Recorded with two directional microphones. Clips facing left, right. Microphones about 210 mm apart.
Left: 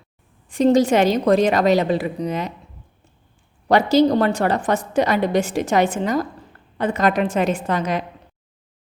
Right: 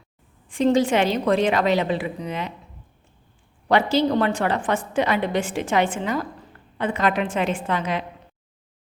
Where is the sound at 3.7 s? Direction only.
40° left (ahead or behind).